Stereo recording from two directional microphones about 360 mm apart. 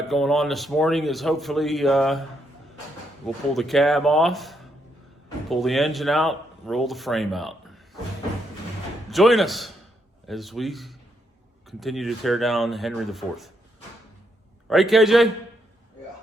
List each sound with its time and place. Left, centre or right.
0.1 s speech: centre
3.2 s speech: centre
9.0 s a man's voice: centre
14.7 s speech: centre